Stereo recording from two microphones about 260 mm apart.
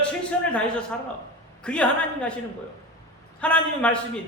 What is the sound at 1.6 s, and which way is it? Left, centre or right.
Speech, centre.